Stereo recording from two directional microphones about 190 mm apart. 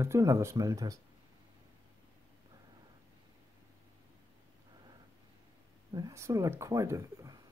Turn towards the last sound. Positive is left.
turn(degrees=-15)  # may be behind; listen again after turning